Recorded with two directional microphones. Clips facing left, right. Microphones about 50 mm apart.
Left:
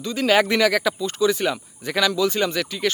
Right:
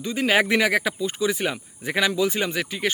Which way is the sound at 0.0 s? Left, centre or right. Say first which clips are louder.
Left 2 dB; centre.